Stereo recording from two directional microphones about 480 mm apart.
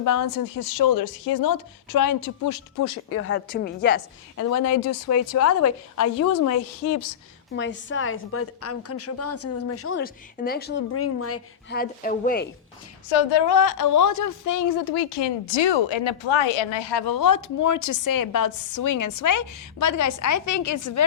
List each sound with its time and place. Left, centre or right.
0.0 s a woman's voice: left; by 4.0 s centre
4.4 s a woman's voice: left
7.5 s a woman's voice: left
13.1 s a woman's voice: left